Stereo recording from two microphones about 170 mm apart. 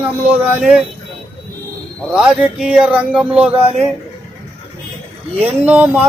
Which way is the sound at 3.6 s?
35° right (ahead or behind).